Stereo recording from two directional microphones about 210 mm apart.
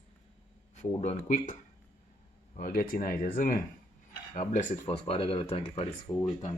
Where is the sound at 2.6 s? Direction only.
45° left (ahead or behind); by 6.2 s 20° left (ahead or behind).